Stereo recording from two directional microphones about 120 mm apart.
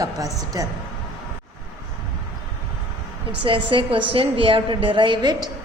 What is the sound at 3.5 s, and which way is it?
A woman's voice, 45° right (ahead or behind).